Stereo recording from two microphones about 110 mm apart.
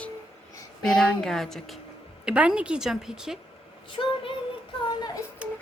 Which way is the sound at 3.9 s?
55° left (ahead or behind).